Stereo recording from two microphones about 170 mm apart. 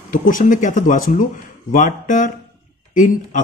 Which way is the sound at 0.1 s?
50° left (ahead or behind).